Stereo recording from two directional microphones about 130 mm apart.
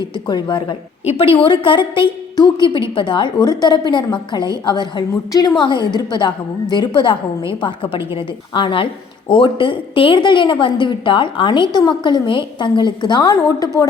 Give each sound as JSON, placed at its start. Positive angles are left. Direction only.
{"t": 0.3, "sound": "a woman's voice", "side_deg": 35}
{"t": 1.0, "sound": "a woman's voice", "side_deg": 45}